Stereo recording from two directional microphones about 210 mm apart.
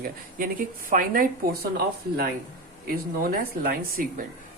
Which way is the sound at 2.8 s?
45° right (ahead or behind).